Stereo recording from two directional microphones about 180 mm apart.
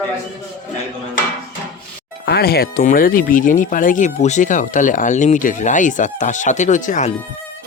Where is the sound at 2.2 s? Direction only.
60° left (ahead or behind); by 7.1 s 45° left (ahead or behind).